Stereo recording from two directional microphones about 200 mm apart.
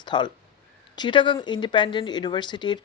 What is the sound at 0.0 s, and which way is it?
Speech, 20° left (ahead or behind).